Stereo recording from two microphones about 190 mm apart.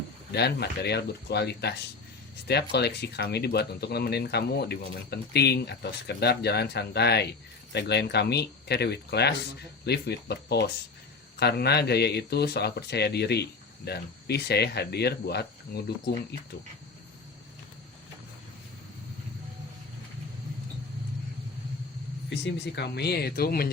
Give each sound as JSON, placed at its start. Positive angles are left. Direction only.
{"t": 0.3, "sound": "speech", "side_deg": 60}
{"t": 22.3, "sound": "speech", "side_deg": 65}